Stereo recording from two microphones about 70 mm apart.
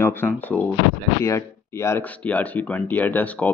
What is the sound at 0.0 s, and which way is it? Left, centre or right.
Speech, left.